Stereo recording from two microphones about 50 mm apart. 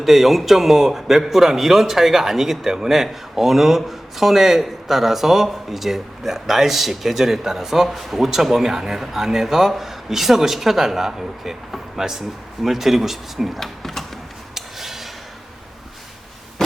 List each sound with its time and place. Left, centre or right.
0.0 s a man's voice: centre
14.5 s a sound: centre
16.6 s hum: centre